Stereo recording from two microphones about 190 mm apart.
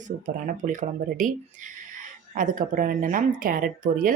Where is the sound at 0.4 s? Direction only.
40° right (ahead or behind).